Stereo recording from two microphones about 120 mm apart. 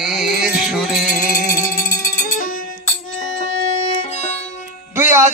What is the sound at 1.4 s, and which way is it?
Music, 25° left (ahead or behind).